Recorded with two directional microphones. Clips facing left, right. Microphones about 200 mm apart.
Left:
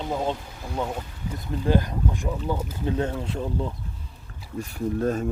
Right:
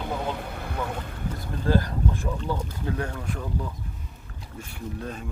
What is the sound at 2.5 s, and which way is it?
Speech, 5° left (ahead or behind).